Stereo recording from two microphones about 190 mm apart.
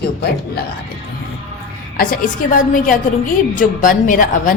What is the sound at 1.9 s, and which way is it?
A woman's voice, 50° left (ahead or behind).